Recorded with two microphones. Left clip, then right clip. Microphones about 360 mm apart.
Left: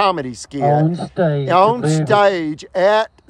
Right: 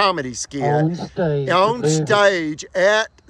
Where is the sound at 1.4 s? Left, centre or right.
Centre.